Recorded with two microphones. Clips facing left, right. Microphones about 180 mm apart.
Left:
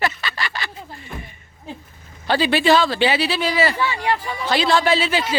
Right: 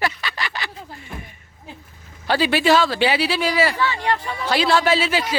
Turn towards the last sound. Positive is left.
turn(degrees=-10)  # may be behind; listen again after turning